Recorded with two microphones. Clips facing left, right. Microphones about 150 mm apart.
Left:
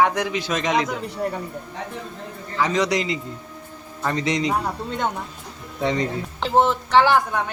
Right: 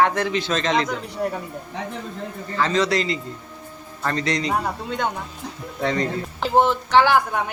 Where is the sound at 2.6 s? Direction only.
15° left (ahead or behind).